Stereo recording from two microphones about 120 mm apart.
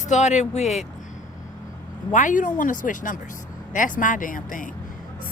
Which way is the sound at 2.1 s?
90° left.